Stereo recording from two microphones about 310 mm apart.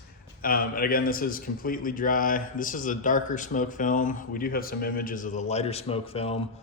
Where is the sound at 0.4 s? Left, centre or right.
Left.